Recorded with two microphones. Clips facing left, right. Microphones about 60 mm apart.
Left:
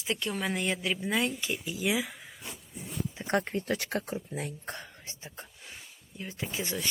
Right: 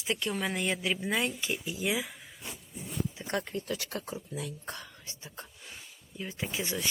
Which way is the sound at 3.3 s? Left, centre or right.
Left.